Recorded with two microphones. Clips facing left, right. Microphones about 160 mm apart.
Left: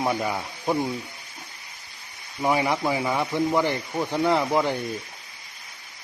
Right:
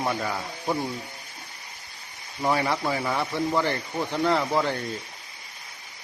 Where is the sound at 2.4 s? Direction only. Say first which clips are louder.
Left 2 dB; 15° left (ahead or behind).